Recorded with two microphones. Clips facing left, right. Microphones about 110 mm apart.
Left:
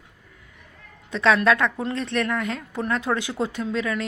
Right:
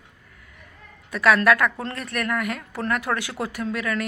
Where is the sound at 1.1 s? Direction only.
25° left (ahead or behind).